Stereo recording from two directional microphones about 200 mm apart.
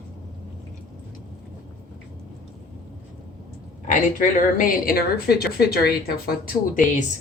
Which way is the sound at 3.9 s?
40° left (ahead or behind).